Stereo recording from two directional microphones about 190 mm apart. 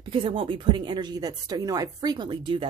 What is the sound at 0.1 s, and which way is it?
Speech, 30° right (ahead or behind).